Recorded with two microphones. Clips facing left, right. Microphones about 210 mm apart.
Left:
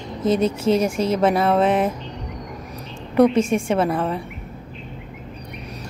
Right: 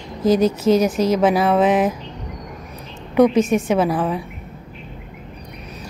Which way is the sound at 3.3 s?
30° left (ahead or behind).